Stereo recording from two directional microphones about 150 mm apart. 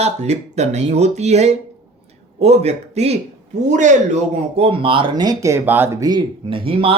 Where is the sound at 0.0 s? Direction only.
50° right (ahead or behind).